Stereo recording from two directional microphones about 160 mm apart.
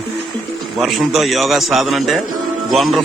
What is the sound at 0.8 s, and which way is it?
A man's voice, centre (ahead or behind).